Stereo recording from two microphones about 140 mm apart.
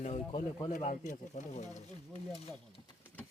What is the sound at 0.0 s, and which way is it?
Speech, 55° left (ahead or behind).